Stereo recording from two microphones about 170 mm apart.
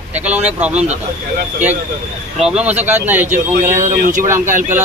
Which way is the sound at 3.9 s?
50° right (ahead or behind).